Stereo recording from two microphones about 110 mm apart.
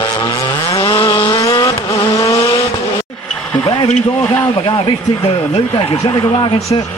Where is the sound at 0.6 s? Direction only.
30° left (ahead or behind).